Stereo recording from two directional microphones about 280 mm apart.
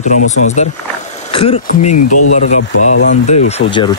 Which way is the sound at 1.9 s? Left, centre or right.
Left.